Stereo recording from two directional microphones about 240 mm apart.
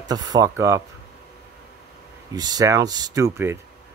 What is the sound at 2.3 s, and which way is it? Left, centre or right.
Speech, centre.